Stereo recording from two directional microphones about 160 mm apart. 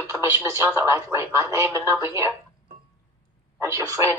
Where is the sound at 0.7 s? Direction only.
15° right (ahead or behind).